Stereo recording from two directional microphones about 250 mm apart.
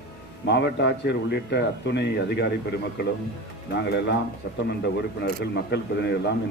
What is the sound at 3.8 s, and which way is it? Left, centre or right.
Speech, left.